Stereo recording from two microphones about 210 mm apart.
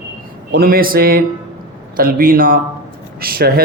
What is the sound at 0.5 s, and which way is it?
A man's voice, 45° right (ahead or behind).